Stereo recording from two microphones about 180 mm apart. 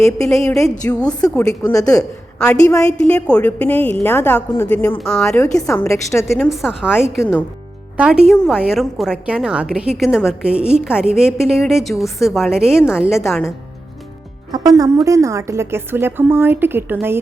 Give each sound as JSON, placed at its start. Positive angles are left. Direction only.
{"t": 0.0, "sound": "a woman's voice", "side_deg": 5}
{"t": 1.6, "sound": "a woman's voice", "side_deg": 20}
{"t": 2.0, "sound": "a woman's voice", "side_deg": 5}
{"t": 5.4, "sound": "a woman's voice", "side_deg": 15}
{"t": 6.3, "sound": "a woman's voice", "side_deg": 0}
{"t": 14.5, "sound": "a woman's voice", "side_deg": -20}